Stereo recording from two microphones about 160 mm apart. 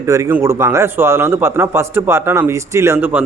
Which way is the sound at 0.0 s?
15° right (ahead or behind).